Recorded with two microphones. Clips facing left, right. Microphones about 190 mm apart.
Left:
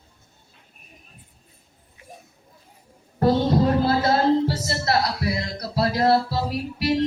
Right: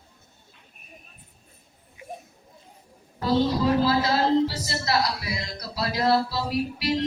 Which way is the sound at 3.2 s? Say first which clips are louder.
Left 3 dB; 55° left (ahead or behind).